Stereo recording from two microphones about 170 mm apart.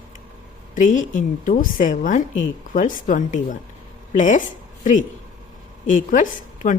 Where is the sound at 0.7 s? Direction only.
50° left (ahead or behind).